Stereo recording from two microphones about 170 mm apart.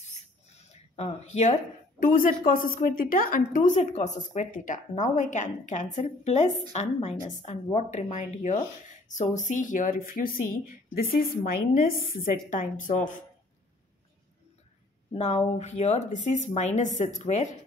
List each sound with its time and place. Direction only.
0.9 s a woman's voice: 40° left (ahead or behind)
15.1 s a woman's voice: 40° left (ahead or behind)